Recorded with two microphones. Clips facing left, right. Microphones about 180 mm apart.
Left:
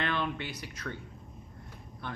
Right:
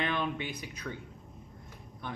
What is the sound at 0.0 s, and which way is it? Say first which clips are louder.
Speech: even; 15° right (ahead or behind).